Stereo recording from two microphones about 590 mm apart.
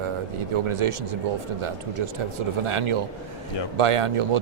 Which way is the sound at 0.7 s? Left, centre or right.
Right.